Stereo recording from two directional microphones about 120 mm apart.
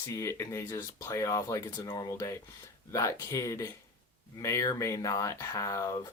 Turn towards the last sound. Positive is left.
turn(degrees=25)  # may be behind; listen again after turning